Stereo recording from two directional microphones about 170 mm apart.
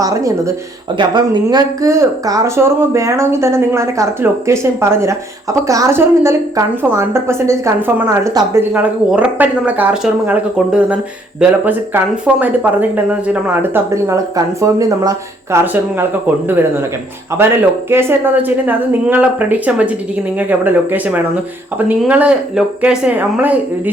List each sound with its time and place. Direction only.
0.0 s speech: 20° right (ahead or behind)
17.3 s speech: 15° right (ahead or behind)